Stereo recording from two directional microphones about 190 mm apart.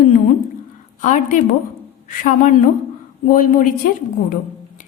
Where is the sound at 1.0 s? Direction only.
40° left (ahead or behind).